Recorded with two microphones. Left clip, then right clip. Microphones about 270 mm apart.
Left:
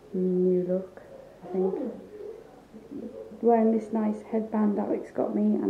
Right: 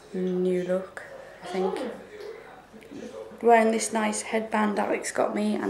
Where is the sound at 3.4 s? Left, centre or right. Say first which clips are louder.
Right 3 dB; centre.